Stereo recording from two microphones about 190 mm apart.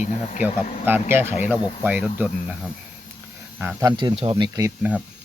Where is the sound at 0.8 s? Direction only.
10° right (ahead or behind).